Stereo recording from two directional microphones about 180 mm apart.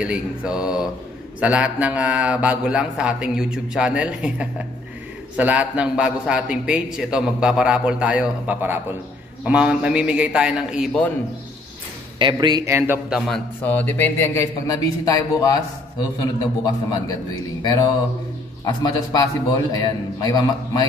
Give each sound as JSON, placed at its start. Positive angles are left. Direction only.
{"t": 0.0, "sound": "a man's voice", "side_deg": -5}
{"t": 12.2, "sound": "speech", "side_deg": -25}
{"t": 13.3, "sound": "a man's voice", "side_deg": 10}
{"t": 18.7, "sound": "a man's voice", "side_deg": 25}